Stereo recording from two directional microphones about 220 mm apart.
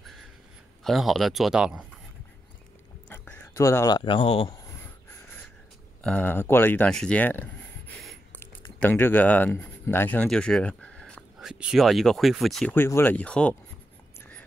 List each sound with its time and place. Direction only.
0.8 s speech: centre (ahead or behind)
3.1 s speech: 10° left (ahead or behind)
6.0 s speech: 10° left (ahead or behind)
8.0 s a sound: centre (ahead or behind)
8.7 s speech: 10° left (ahead or behind)